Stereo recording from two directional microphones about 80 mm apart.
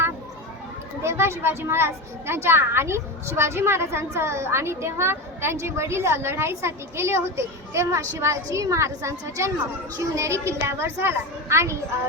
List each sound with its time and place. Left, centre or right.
1.0 s a child's voice: right